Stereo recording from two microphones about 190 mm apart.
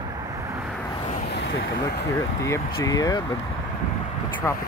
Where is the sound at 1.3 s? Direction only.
60° left (ahead or behind).